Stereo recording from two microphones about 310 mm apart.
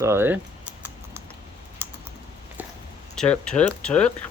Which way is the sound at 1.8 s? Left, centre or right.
Centre.